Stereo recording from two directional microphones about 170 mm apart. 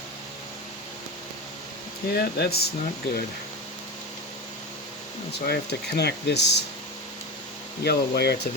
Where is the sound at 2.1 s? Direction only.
65° left (ahead or behind).